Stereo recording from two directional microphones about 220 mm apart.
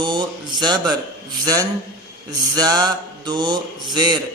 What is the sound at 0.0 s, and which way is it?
Mantra, 20° right (ahead or behind).